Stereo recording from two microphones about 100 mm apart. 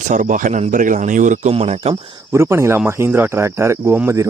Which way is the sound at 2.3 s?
25° right (ahead or behind).